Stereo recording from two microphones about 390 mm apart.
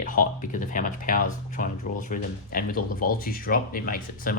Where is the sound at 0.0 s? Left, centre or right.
Left.